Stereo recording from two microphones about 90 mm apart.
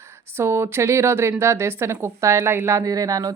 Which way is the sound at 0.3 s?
30° right (ahead or behind).